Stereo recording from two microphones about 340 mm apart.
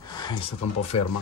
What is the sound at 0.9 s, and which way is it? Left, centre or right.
Speech, left.